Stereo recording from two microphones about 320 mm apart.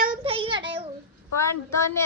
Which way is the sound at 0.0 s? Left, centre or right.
Centre.